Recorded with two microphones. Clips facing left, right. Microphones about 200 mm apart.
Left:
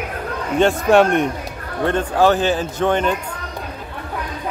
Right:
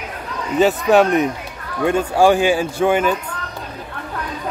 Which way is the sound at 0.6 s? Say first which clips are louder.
Even; centre (ahead or behind).